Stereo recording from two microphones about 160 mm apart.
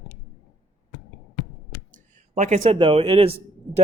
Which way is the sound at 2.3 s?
50° right (ahead or behind).